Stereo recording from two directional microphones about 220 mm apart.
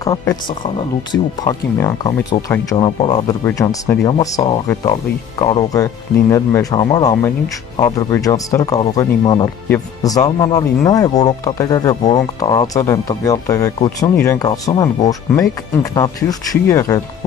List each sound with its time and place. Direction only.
0.0 s speech: 15° left (ahead or behind)